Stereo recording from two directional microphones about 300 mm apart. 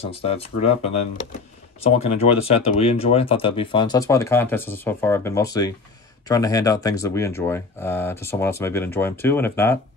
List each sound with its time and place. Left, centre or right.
0.0 s speech: centre